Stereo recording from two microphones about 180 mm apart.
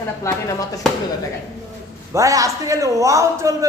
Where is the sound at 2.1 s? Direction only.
15° right (ahead or behind).